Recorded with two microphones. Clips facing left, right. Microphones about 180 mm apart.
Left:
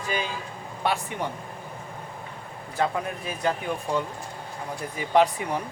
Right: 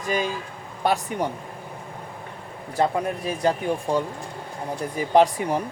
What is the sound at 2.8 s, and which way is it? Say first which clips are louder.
Speech: right 4 dB; 35° right (ahead or behind).